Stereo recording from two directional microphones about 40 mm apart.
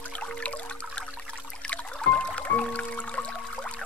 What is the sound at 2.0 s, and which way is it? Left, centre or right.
Music, left.